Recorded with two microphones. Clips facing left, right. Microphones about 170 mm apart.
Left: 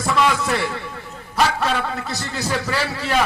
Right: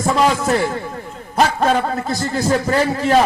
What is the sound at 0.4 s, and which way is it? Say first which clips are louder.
A man's voice: right 5 dB; 45° right (ahead or behind).